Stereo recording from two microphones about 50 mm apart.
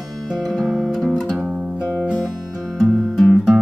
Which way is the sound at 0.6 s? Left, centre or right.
Centre.